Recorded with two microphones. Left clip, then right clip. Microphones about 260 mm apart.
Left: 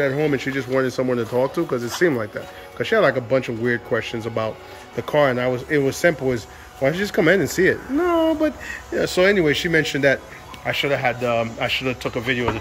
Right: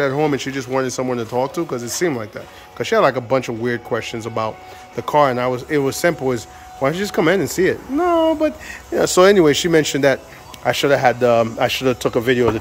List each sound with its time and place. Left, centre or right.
0.0 s speech: centre